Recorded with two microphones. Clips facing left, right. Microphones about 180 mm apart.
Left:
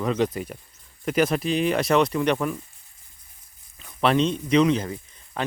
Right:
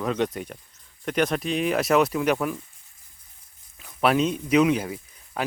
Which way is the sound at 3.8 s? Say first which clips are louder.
Even; 5° right (ahead or behind).